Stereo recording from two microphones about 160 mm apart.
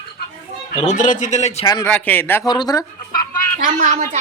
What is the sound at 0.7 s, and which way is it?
Speech, 50° left (ahead or behind).